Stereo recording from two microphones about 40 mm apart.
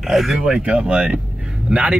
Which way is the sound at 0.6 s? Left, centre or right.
Right.